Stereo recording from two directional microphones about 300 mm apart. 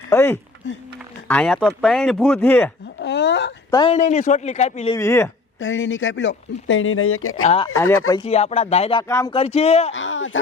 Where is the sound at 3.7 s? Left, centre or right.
Centre.